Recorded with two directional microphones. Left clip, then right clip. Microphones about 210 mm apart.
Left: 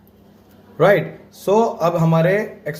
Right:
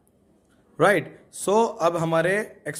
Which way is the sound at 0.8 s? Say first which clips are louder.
Left 5 dB; 35° right (ahead or behind).